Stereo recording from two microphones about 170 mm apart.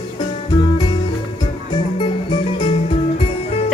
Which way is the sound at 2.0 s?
30° left (ahead or behind).